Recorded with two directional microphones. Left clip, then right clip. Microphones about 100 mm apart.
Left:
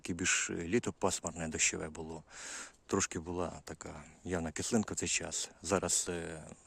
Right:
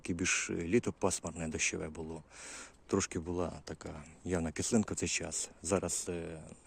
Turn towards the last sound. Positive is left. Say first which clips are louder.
# even
turn(degrees=40)  # may be behind; listen again after turning